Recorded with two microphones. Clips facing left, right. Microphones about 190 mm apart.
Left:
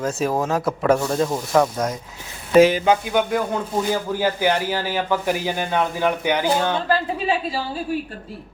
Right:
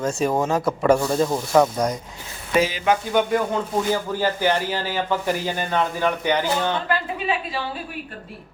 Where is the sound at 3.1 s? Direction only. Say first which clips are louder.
Even; 5° left (ahead or behind).